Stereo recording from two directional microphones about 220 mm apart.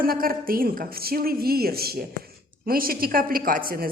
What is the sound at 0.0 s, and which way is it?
A woman's voice, 40° right (ahead or behind).